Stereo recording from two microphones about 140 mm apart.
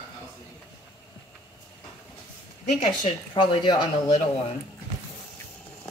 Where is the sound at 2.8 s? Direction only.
40° left (ahead or behind).